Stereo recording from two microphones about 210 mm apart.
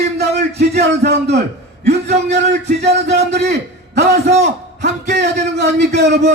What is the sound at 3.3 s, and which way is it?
A man's voice, 50° right (ahead or behind).